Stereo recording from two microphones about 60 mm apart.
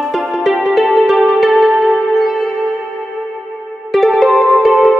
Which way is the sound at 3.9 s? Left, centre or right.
Centre.